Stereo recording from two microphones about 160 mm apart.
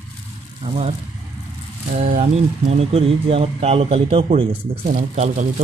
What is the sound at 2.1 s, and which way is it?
Speech, 40° right (ahead or behind).